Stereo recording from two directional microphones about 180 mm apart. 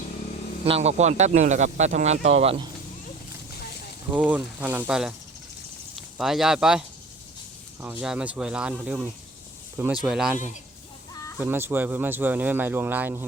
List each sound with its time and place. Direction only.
0.6 s speech: 35° right (ahead or behind)
4.1 s speech: 5° right (ahead or behind)
10.3 s a man's voice: 45° left (ahead or behind)
11.3 s speech: 10° right (ahead or behind)